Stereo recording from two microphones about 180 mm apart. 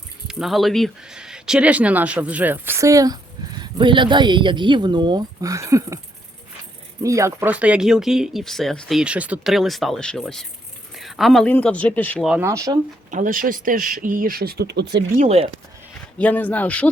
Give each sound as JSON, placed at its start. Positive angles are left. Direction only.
{"t": 0.3, "sound": "speech", "side_deg": 0}
{"t": 7.0, "sound": "speech", "side_deg": -15}
{"t": 12.4, "sound": "speech", "side_deg": -15}
{"t": 13.1, "sound": "speech", "side_deg": -45}
{"t": 15.1, "sound": "speech", "side_deg": -40}
{"t": 16.1, "sound": "speech", "side_deg": 10}